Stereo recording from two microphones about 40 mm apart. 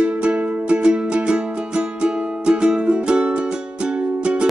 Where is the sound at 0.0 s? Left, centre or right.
Right.